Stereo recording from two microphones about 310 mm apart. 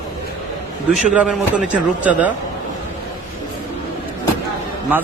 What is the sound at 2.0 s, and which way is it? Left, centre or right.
Speech, centre.